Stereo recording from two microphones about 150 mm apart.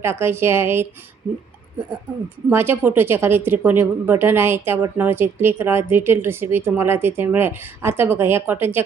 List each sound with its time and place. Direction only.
0.0 s a woman's voice: 15° right (ahead or behind)
2.5 s a woman's voice: 15° right (ahead or behind)